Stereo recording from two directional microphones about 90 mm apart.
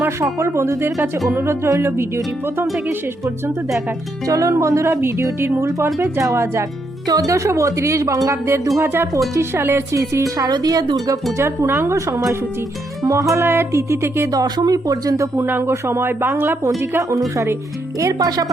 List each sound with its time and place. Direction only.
0.0 s speech: 30° right (ahead or behind)
1.3 s music: 25° right (ahead or behind)
4.3 s speech: 35° right (ahead or behind)
5.5 s music: 25° right (ahead or behind)
6.2 s speech: 30° right (ahead or behind)
8.8 s music: 25° right (ahead or behind)
9.3 s speech: 30° right (ahead or behind)
11.4 s music: 25° right (ahead or behind)
14.3 s speech: 45° right (ahead or behind)
15.4 s music: 25° right (ahead or behind)
16.9 s speech: 35° right (ahead or behind)